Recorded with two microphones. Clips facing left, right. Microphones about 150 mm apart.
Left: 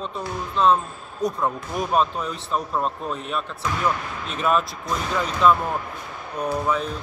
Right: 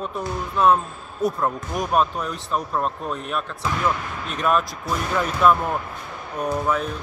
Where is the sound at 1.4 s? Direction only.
Centre (ahead or behind).